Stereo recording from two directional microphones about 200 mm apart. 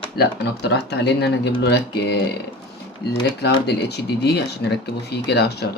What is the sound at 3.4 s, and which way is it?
Speech, 55° left (ahead or behind).